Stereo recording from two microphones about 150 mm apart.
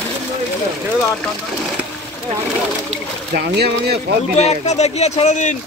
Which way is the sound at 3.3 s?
90° right.